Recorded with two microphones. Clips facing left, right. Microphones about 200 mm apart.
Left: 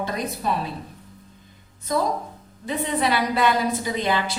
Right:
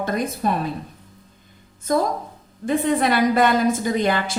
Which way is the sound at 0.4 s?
50° right (ahead or behind).